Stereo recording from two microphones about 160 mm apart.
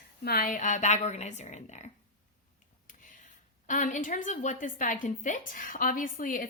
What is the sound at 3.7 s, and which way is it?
A woman's voice, 55° left (ahead or behind).